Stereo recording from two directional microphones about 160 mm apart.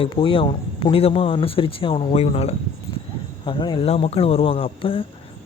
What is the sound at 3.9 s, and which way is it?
Speech, 40° left (ahead or behind).